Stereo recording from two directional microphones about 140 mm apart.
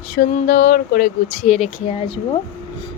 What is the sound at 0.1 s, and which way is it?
Speech, 70° left (ahead or behind).